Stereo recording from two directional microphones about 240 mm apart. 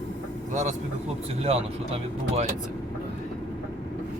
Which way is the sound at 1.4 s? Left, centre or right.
Right.